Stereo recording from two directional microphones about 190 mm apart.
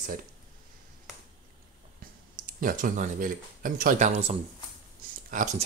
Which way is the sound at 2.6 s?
45° right (ahead or behind).